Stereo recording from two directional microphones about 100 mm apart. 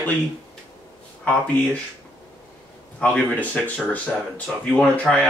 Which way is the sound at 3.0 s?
15° left (ahead or behind).